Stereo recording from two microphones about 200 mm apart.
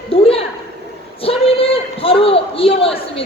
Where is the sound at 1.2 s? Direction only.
30° left (ahead or behind).